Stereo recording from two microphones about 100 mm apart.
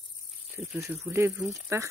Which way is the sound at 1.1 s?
25° right (ahead or behind).